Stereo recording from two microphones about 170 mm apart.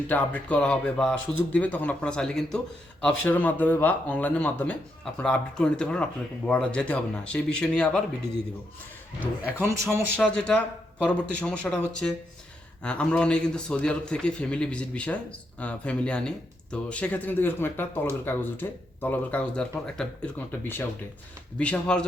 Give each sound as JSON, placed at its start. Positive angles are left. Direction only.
{"t": 0.1, "sound": "speech", "side_deg": 10}
{"t": 9.6, "sound": "a man's voice", "side_deg": -15}
{"t": 10.2, "sound": "a man's voice", "side_deg": 5}